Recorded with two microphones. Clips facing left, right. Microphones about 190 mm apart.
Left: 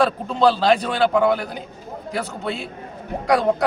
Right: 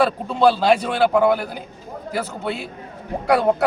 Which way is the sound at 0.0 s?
10° right (ahead or behind).